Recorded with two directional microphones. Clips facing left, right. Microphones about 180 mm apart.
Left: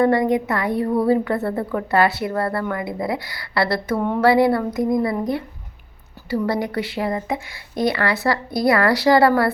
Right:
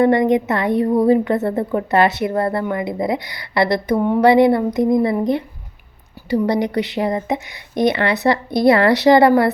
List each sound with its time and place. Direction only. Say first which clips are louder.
0.0 s a woman's voice: right 3 dB; 20° right (ahead or behind)